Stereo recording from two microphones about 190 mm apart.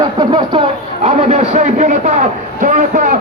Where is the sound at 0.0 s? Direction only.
25° right (ahead or behind).